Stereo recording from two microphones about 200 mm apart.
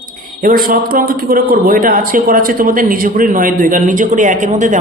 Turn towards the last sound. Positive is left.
turn(degrees=-40)  # may be behind; listen again after turning